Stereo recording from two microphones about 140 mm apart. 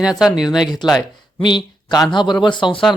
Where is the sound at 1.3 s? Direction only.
30° left (ahead or behind).